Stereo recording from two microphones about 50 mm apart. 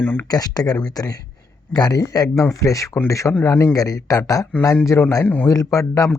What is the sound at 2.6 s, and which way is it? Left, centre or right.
Speech, left.